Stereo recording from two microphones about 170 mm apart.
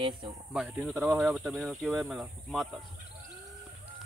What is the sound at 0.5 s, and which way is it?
Speech, 5° right (ahead or behind).